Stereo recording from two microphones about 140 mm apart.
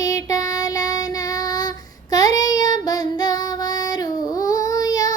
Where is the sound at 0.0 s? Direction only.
25° left (ahead or behind).